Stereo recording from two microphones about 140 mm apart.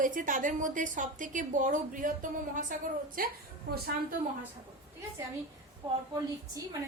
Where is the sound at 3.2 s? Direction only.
90° right.